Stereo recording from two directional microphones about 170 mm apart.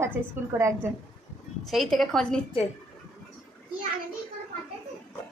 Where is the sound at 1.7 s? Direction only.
Centre (ahead or behind).